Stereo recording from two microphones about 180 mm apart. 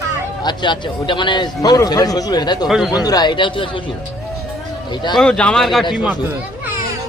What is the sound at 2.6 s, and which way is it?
Speech, centre (ahead or behind).